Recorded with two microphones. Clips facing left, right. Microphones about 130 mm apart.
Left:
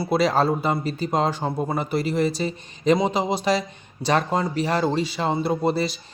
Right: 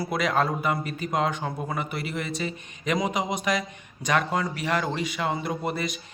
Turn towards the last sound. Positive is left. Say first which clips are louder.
# left 7 dB
turn(degrees=30)  # may be behind; listen again after turning